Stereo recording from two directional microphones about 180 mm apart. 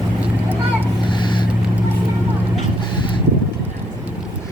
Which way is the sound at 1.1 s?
25° left (ahead or behind).